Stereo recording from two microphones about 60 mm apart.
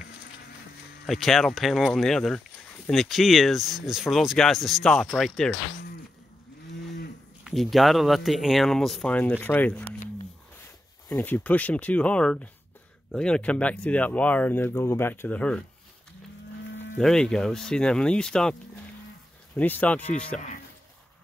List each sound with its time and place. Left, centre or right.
1.0 s speech: centre
7.6 s speech: centre
9.1 s speech: left
11.1 s speech: left
15.3 s speech: left
17.0 s speech: centre
19.6 s speech: left